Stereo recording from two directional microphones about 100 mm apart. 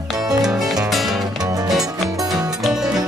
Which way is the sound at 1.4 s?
35° right (ahead or behind).